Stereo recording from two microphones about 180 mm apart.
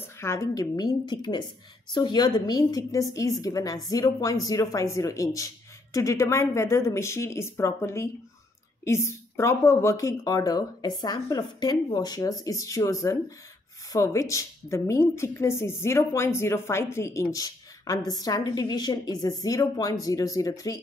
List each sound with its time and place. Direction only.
0.0 s a woman's voice: 15° left (ahead or behind)